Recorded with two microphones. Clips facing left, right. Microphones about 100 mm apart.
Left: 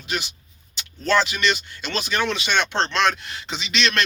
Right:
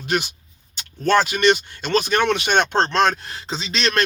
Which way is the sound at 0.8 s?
50° right (ahead or behind).